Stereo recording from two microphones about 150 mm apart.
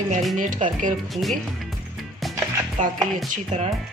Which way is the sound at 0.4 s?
60° right (ahead or behind).